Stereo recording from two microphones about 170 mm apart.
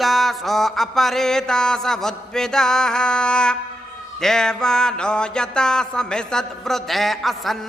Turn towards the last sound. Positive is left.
turn(degrees=0)  # may be behind; listen again after turning